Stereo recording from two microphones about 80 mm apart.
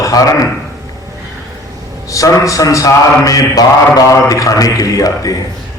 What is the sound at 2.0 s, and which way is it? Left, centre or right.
Speech, left.